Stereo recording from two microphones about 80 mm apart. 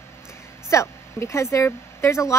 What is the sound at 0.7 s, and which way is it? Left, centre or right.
Speech, left.